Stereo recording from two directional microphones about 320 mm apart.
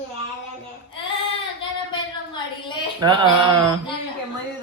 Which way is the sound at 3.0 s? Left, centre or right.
Centre.